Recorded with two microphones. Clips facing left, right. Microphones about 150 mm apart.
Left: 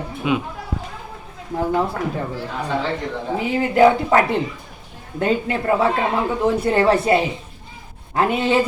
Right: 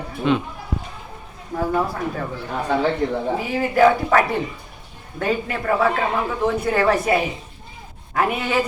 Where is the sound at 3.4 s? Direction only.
20° left (ahead or behind).